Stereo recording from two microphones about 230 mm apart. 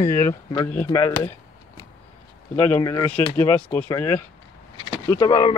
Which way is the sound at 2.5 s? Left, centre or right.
Centre.